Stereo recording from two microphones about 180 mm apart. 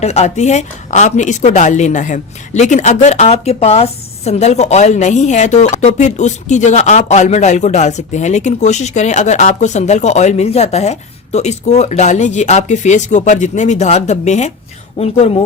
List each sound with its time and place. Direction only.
0.0 s a woman's voice: 35° left (ahead or behind)